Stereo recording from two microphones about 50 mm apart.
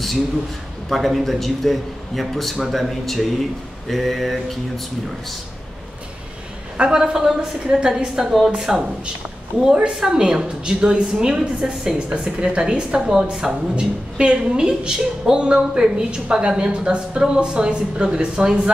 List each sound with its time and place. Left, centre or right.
0.8 s a man's voice: centre
6.8 s a woman's voice: centre